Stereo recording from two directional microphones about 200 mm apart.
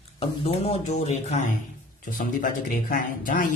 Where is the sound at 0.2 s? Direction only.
30° left (ahead or behind).